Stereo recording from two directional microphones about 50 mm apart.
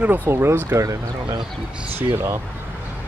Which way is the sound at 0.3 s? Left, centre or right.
Right.